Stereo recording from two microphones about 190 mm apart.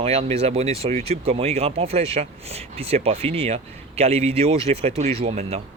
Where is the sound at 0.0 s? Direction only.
30° right (ahead or behind).